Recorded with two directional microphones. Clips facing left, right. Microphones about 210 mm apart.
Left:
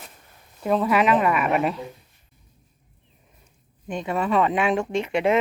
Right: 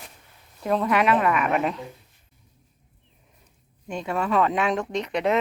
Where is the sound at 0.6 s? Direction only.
5° left (ahead or behind).